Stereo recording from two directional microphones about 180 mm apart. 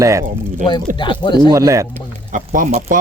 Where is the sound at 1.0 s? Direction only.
25° left (ahead or behind).